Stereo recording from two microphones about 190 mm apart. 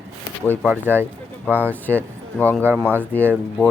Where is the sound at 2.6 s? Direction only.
10° right (ahead or behind).